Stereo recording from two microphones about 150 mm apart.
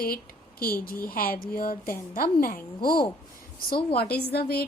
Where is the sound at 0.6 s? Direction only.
75° left (ahead or behind).